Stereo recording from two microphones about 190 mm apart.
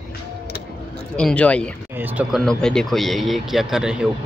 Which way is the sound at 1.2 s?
5° left (ahead or behind).